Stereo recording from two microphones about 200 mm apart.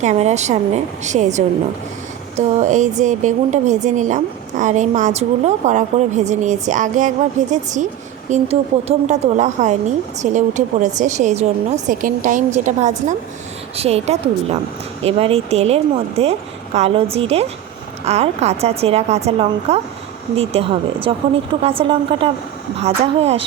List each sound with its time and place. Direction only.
0.0 s a woman's voice: 35° right (ahead or behind)